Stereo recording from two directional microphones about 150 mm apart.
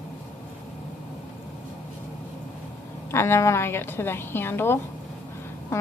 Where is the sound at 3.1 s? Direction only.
15° left (ahead or behind).